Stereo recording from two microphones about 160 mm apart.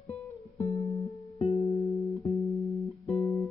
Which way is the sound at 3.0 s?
40° left (ahead or behind).